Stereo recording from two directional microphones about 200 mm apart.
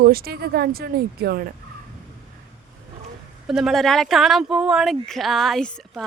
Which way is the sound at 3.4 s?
Centre (ahead or behind).